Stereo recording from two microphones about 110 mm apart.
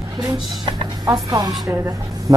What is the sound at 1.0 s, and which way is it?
Speech, 30° right (ahead or behind).